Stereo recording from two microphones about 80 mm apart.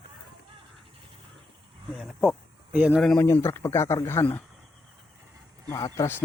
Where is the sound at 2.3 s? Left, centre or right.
Centre.